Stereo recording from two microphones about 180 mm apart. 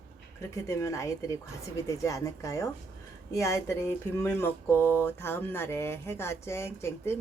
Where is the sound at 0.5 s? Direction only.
15° left (ahead or behind).